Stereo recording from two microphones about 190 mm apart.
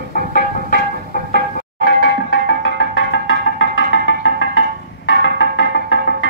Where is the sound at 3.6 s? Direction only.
80° left.